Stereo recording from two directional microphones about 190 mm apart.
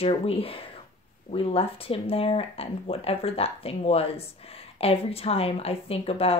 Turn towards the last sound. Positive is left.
turn(degrees=30)  # may be behind; listen again after turning